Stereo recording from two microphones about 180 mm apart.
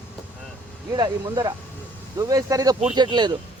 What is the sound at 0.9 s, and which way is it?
Speech, 25° right (ahead or behind).